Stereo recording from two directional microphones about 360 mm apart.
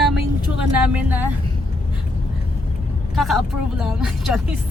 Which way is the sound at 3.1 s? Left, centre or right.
Centre.